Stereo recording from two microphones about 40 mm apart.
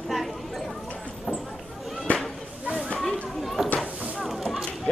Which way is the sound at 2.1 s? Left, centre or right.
Left.